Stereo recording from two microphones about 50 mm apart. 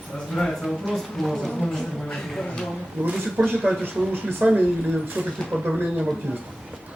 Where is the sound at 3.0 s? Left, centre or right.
Right.